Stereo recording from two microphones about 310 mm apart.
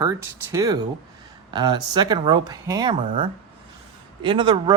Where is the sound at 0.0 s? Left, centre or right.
Centre.